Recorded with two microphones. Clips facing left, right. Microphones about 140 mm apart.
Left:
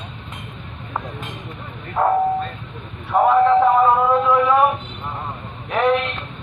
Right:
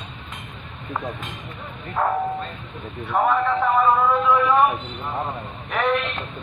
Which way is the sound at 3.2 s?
25° left (ahead or behind).